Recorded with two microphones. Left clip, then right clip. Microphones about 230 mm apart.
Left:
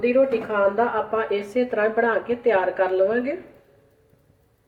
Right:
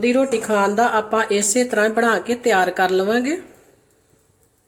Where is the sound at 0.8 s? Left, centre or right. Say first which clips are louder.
Right 5 dB; right.